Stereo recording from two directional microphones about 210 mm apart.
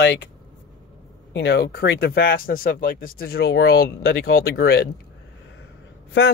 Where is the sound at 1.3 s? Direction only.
55° left (ahead or behind).